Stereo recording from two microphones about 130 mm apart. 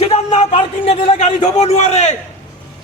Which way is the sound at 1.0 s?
50° left (ahead or behind).